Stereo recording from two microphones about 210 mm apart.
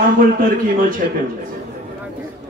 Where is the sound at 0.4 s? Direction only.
40° right (ahead or behind).